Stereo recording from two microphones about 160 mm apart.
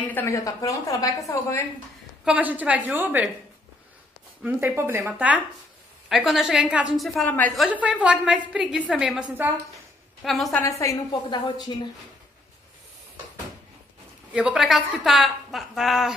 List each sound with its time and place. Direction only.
0.1 s a woman's voice: 15° left (ahead or behind)
2.2 s speech: 10° right (ahead or behind)
4.4 s a woman's voice: 10° right (ahead or behind)
7.0 s a woman's voice: 5° left (ahead or behind)
7.5 s a woman's voice: 5° right (ahead or behind)
10.2 s a woman's voice: centre (ahead or behind)
10.8 s a woman's voice: 25° left (ahead or behind)
14.3 s a woman's voice: 5° right (ahead or behind)